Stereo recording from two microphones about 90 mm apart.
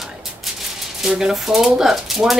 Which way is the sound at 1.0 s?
5° right (ahead or behind).